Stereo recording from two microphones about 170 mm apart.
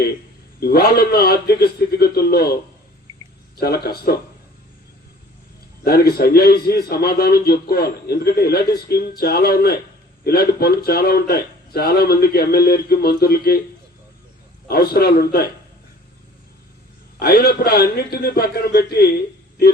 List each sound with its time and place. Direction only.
0.6 s speech: 65° left (ahead or behind)
3.6 s speech: 65° left (ahead or behind)
5.8 s speech: 65° left (ahead or behind)
14.7 s speech: 65° left (ahead or behind)
17.2 s speech: 65° left (ahead or behind)